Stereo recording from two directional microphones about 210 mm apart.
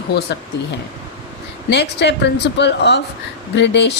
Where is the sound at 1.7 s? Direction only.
55° left (ahead or behind).